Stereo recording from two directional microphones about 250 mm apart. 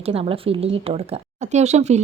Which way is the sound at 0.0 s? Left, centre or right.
Right.